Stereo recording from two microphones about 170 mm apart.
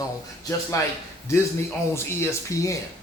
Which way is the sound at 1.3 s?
15° left (ahead or behind).